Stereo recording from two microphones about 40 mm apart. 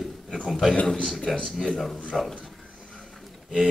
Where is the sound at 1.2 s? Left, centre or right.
Centre.